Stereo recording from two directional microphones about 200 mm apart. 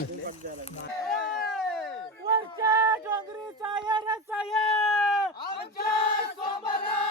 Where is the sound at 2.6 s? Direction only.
15° right (ahead or behind).